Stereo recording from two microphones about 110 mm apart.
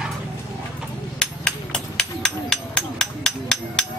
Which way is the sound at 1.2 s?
10° left (ahead or behind).